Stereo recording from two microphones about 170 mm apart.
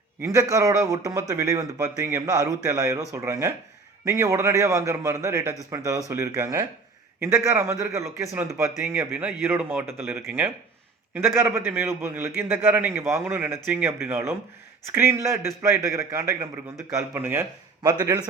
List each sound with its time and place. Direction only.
0.2 s a man's voice: 20° right (ahead or behind)